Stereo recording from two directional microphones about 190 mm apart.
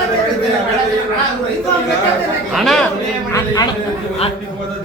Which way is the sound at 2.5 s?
Centre (ahead or behind).